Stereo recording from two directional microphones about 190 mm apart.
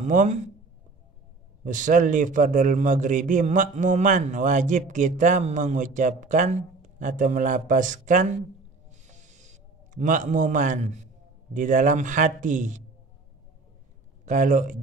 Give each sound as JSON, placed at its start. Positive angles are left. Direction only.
{"t": 0.0, "sound": "a man's voice", "side_deg": -40}
{"t": 1.6, "sound": "a man's voice", "side_deg": -45}
{"t": 9.0, "sound": "a sound", "side_deg": -40}
{"t": 11.5, "sound": "a man's voice", "side_deg": -40}
{"t": 14.2, "sound": "a man's voice", "side_deg": -40}